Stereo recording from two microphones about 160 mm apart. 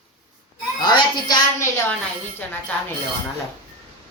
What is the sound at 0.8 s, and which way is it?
A woman's voice, 25° left (ahead or behind).